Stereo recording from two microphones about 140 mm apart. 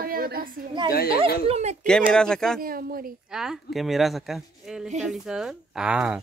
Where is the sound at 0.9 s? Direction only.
90° left.